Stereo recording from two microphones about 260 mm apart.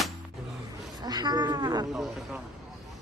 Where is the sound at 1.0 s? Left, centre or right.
Centre.